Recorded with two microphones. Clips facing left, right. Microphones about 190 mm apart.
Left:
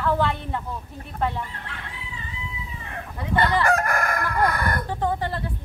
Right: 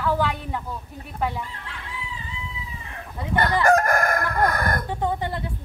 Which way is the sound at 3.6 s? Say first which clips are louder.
Right 4 dB; 45° right (ahead or behind).